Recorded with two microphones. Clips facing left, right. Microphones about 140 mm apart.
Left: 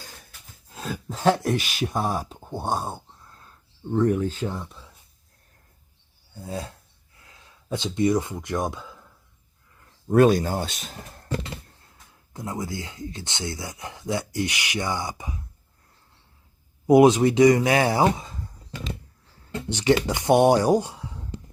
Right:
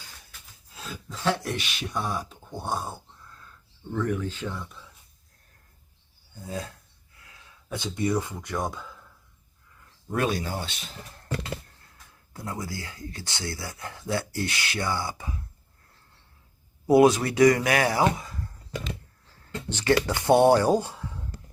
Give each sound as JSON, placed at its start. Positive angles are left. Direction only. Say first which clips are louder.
{"t": 0.0, "sound": "a sound", "louder": "left 4 dB", "side_deg": 45}
{"t": 3.9, "sound": "speech", "louder": "left 6 dB", "side_deg": 35}
{"t": 6.3, "sound": "speech", "louder": "left 2 dB", "side_deg": 35}
{"t": 10.1, "sound": "speech", "louder": "left 10 dB", "side_deg": 45}
{"t": 12.3, "sound": "speech", "louder": "left 3 dB", "side_deg": 20}
{"t": 16.8, "sound": "speech", "louder": "left 3 dB", "side_deg": 20}